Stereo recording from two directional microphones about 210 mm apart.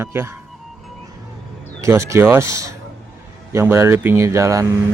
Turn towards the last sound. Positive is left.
turn(degrees=-15)  # may be behind; listen again after turning